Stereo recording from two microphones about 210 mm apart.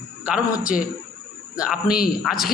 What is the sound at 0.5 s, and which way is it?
Speech, 40° left (ahead or behind).